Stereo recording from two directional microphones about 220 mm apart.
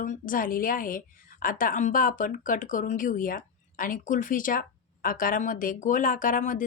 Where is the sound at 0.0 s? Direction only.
35° left (ahead or behind).